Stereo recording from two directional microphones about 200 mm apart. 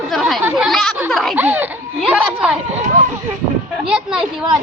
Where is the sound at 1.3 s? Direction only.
10° right (ahead or behind).